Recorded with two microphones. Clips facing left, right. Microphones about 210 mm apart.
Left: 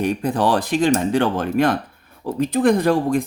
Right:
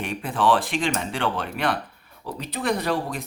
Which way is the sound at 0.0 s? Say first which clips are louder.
Left 5 dB; 40° left (ahead or behind).